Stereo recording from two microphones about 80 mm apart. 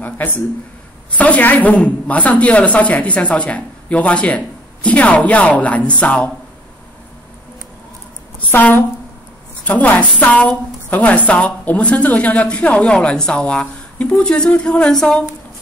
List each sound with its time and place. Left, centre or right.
1.1 s a woman's voice: centre
8.5 s a woman's voice: left; by 15.2 s centre